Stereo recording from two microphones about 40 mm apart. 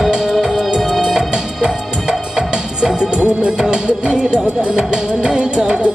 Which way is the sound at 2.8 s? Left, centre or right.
Right.